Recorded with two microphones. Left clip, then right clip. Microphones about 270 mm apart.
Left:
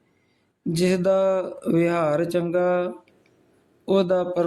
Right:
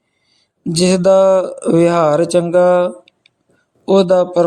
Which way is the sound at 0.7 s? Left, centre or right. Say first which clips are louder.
Right 9 dB; centre.